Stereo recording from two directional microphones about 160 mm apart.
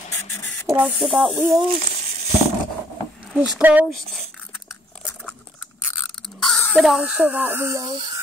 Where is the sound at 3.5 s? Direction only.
10° right (ahead or behind).